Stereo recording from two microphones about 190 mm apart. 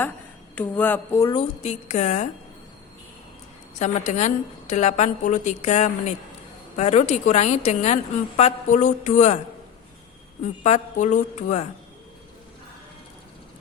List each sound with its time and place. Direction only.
0.5 s speech: 10° left (ahead or behind)
1.3 s a woman's voice: 35° left (ahead or behind)
3.8 s a woman's voice: 40° left (ahead or behind)
10.6 s a woman's voice: 40° left (ahead or behind)